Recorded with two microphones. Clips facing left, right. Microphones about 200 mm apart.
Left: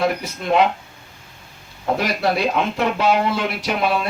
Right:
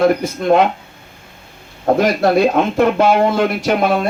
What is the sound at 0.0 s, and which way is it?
Speech, 50° right (ahead or behind).